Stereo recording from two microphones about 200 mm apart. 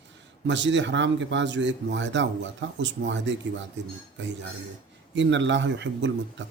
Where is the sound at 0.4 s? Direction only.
65° right (ahead or behind).